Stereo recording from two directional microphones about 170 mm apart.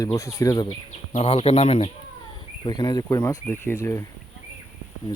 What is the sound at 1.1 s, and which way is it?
Speech, 35° left (ahead or behind).